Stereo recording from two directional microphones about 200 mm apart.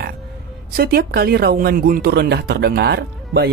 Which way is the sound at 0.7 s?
50° right (ahead or behind).